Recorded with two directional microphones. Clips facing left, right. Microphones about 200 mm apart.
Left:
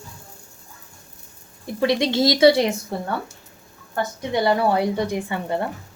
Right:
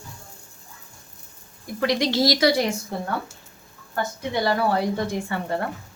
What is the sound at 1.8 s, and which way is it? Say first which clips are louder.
Speech: left 2 dB; 25° left (ahead or behind).